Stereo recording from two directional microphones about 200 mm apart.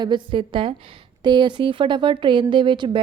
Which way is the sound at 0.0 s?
25° right (ahead or behind).